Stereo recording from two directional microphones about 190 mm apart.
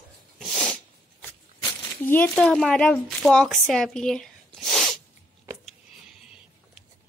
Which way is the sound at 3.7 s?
5° left (ahead or behind).